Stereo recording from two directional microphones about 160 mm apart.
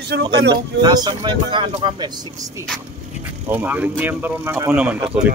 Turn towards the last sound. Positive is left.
turn(degrees=-10)  # may be behind; listen again after turning